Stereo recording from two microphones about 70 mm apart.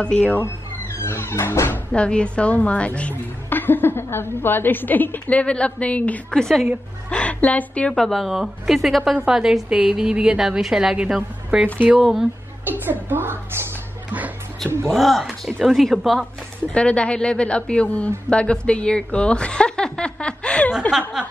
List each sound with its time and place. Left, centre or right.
0.0 s speech: centre
1.0 s music: left
1.9 s a woman's voice: centre
6.3 s speech: centre
7.1 s a woman's voice: centre
7.9 s a woman's voice: centre
11.6 s speech: right
12.0 s speech: centre
12.6 s a woman's voice: right
14.9 s speech: centre
16.7 s speech: centre
21.2 s speech: centre